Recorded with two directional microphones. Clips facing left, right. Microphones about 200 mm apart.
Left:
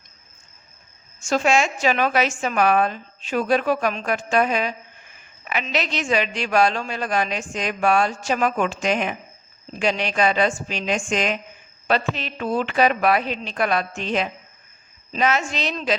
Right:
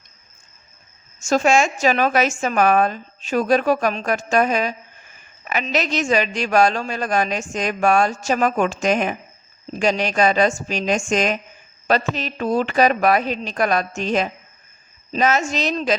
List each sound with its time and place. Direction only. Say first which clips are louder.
1.2 s a woman's voice: right 3 dB; 45° right (ahead or behind)